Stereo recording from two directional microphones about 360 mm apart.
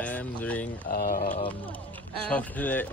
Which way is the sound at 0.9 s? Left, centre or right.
Left.